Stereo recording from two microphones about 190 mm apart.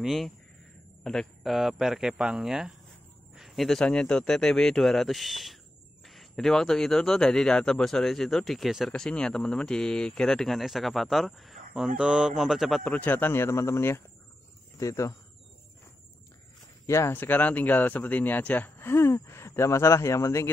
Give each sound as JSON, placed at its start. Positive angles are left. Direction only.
{"t": 0.0, "sound": "a man's voice", "side_deg": 0}
{"t": 16.8, "sound": "speech", "side_deg": 15}